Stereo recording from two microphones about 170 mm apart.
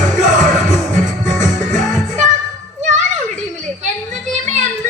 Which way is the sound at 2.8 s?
45° right (ahead or behind).